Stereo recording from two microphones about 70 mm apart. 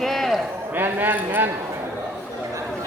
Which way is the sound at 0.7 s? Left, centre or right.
Right.